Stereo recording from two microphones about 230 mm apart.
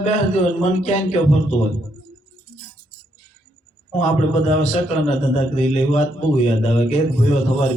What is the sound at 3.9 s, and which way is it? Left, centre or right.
A man's voice, left.